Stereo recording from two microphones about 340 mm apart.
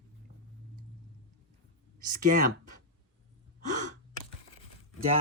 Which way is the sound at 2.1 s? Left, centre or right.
Right.